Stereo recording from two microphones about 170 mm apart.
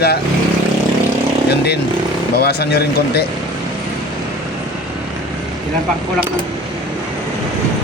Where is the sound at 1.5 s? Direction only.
70° left (ahead or behind).